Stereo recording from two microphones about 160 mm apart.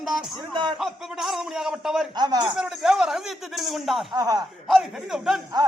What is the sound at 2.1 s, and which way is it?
Speech, 25° right (ahead or behind).